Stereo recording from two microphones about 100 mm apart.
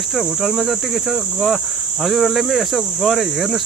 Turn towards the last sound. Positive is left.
turn(degrees=0)  # may be behind; listen again after turning